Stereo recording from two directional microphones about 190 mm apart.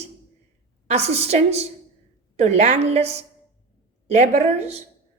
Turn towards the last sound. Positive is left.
turn(degrees=-35)  # may be behind; listen again after turning